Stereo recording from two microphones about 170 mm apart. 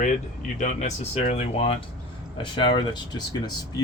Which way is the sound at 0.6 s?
45° left (ahead or behind).